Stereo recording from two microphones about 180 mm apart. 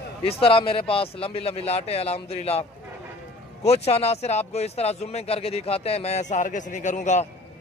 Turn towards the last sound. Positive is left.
turn(degrees=40)  # may be behind; listen again after turning